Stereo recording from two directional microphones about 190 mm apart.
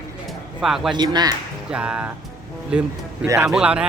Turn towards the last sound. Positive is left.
turn(degrees=-5)  # may be behind; listen again after turning